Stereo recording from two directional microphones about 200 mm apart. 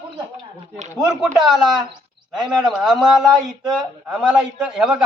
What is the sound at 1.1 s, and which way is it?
A man's voice, centre (ahead or behind).